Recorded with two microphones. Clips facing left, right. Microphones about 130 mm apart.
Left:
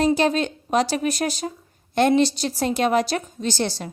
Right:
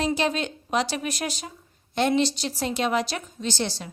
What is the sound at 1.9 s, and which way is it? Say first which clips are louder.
A woman's voice: left 5 dB; 50° left (ahead or behind).